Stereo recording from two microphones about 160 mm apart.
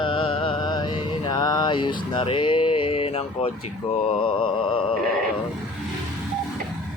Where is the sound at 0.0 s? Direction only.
30° left (ahead or behind).